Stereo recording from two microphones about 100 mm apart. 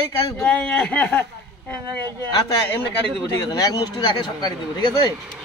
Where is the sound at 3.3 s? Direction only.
40° left (ahead or behind).